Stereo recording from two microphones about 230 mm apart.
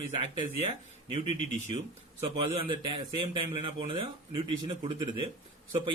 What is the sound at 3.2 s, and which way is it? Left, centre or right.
A man's voice, right.